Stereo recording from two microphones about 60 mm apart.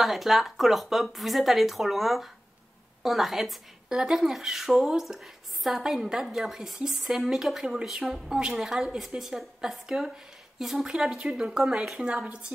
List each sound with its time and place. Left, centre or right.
0.0 s speech: centre